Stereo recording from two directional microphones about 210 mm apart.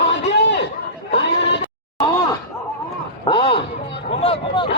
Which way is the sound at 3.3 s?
25° left (ahead or behind).